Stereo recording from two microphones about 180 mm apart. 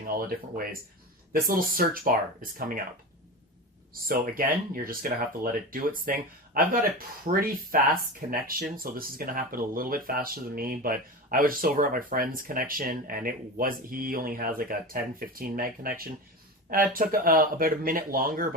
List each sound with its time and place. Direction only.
0.0 s speech: 55° right (ahead or behind)
4.1 s speech: 50° right (ahead or behind)